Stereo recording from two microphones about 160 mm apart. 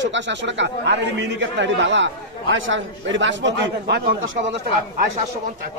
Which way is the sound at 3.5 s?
90° right.